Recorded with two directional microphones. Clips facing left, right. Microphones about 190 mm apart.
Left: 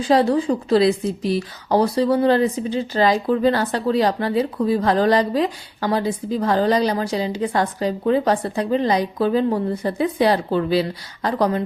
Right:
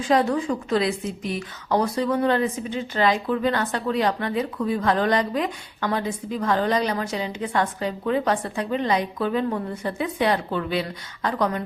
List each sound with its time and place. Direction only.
0.0 s a woman's voice: 30° left (ahead or behind)